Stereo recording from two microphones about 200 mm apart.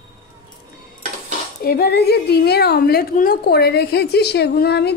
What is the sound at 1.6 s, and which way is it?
A woman's voice, 50° left (ahead or behind).